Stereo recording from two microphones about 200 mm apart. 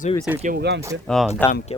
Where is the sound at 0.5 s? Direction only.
55° right (ahead or behind).